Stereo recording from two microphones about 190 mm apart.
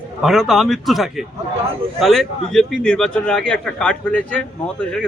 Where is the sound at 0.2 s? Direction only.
Centre (ahead or behind).